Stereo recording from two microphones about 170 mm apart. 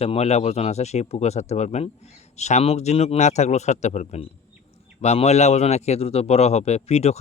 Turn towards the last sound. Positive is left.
turn(degrees=40)  # may be behind; listen again after turning